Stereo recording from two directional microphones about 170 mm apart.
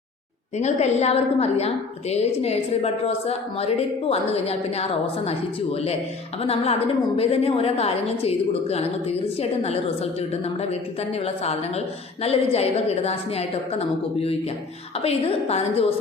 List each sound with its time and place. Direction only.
0.5 s a woman's voice: 40° left (ahead or behind)